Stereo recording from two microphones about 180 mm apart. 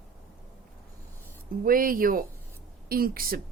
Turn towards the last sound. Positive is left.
turn(degrees=-55)  # may be behind; listen again after turning